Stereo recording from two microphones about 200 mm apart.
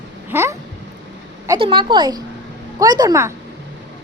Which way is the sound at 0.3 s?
10° right (ahead or behind).